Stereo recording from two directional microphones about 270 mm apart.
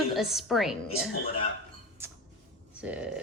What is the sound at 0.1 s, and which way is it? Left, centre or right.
Speech, centre.